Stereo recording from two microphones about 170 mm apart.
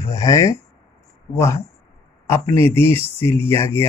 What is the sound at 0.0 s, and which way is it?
Speech, 20° left (ahead or behind).